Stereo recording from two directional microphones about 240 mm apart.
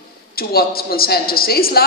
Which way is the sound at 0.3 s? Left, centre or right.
Left.